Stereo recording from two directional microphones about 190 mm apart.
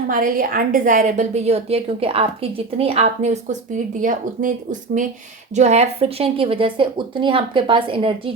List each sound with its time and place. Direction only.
0.1 s a woman's voice: 50° right (ahead or behind)
5.5 s a woman's voice: 35° right (ahead or behind)